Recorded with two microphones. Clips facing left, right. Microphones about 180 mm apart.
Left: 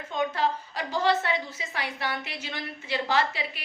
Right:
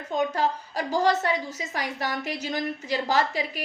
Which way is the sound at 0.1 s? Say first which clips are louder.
Right 2 dB; 40° right (ahead or behind).